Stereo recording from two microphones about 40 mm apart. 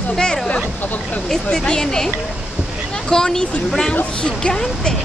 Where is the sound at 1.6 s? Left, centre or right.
Centre.